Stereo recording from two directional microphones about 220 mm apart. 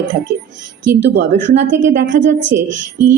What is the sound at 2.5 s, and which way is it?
Speech, 10° right (ahead or behind).